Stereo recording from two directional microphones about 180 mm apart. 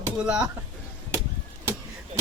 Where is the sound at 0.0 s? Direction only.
5° right (ahead or behind).